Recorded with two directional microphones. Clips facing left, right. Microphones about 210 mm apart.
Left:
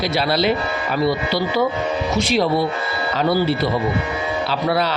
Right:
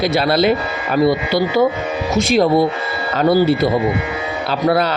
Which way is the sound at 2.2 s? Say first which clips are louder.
Right 6 dB; 45° right (ahead or behind).